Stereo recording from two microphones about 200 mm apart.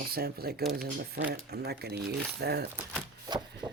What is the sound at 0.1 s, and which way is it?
Speech, 50° right (ahead or behind).